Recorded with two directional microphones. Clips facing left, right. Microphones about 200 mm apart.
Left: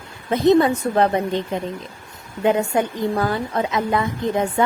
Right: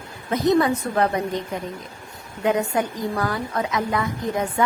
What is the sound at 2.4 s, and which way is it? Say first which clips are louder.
A woman's voice: left 3 dB; 25° left (ahead or behind).